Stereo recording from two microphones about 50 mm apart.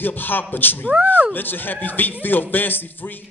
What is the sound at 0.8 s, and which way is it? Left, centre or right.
Speech, right.